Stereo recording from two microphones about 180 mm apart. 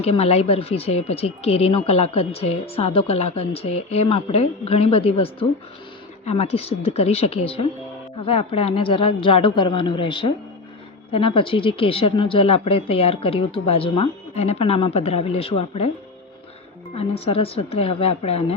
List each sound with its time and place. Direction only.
0.0 s a woman's voice: 35° left (ahead or behind)
17.0 s speech: 30° left (ahead or behind)